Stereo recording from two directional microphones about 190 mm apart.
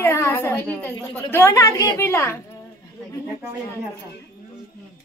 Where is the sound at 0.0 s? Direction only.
10° left (ahead or behind).